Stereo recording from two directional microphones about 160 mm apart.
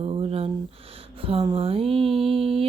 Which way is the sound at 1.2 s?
35° right (ahead or behind).